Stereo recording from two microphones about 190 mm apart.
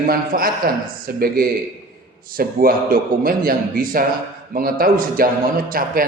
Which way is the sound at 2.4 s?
50° right (ahead or behind).